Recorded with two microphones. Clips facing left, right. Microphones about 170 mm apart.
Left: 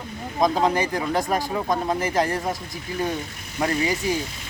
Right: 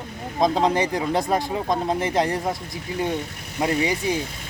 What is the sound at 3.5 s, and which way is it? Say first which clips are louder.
Speech: right 1 dB; 20° right (ahead or behind).